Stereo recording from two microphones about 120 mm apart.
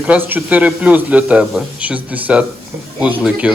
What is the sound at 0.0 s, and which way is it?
Speech, 15° right (ahead or behind).